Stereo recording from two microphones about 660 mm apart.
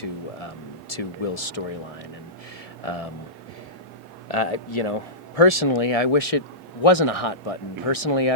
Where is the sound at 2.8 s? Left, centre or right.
Left.